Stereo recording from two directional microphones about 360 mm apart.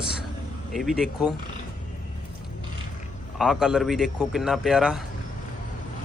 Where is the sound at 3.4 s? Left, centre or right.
Centre.